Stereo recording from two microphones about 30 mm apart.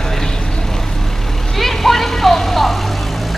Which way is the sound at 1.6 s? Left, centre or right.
Centre.